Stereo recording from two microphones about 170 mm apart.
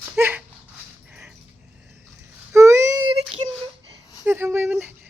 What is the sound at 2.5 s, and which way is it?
Babbling, 15° right (ahead or behind).